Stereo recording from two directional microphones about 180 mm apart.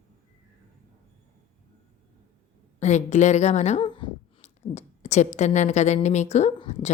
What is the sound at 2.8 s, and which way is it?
A woman's voice, 40° left (ahead or behind).